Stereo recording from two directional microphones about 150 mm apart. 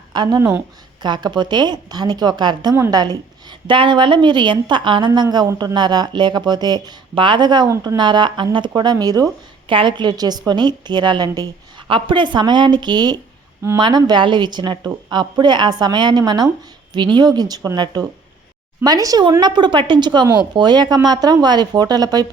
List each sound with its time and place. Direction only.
0.1 s a woman's voice: 30° right (ahead or behind)